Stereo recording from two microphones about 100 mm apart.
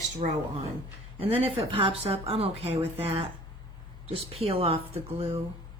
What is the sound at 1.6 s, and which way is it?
A woman's voice, 70° right (ahead or behind).